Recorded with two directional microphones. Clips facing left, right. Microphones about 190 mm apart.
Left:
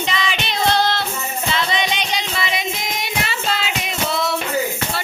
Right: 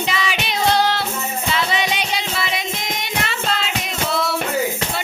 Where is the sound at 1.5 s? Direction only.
10° right (ahead or behind).